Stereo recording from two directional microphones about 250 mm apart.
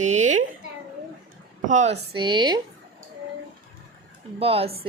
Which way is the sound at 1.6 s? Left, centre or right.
Right.